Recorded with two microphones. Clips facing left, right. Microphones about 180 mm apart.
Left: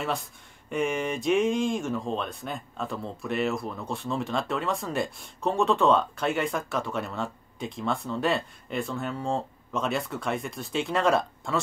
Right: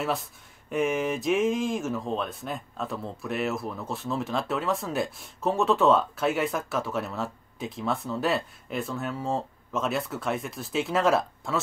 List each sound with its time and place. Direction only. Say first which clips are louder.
0.0 s speech: right 2 dB; centre (ahead or behind)